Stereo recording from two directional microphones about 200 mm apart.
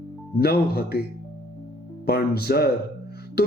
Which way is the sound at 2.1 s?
50° left (ahead or behind).